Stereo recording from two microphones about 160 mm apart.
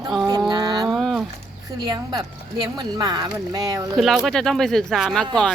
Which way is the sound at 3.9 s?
Centre (ahead or behind).